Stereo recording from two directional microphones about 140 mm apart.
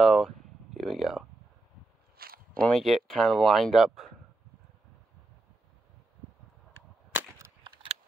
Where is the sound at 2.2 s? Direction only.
90° right.